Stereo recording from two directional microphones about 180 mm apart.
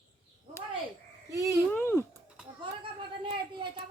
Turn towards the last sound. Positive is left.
turn(degrees=-30)  # may be behind; listen again after turning